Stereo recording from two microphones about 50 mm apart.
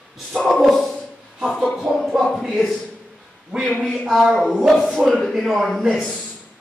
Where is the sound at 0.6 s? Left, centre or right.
Centre.